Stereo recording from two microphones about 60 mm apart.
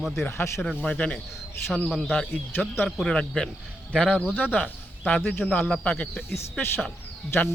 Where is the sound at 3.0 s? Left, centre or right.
Centre.